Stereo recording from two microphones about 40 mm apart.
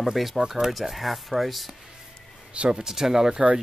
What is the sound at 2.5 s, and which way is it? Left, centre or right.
Speech, right.